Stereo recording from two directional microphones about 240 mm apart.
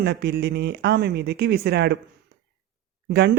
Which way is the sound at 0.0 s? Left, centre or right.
Right.